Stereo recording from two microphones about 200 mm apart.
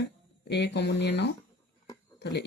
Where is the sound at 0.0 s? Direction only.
60° left (ahead or behind).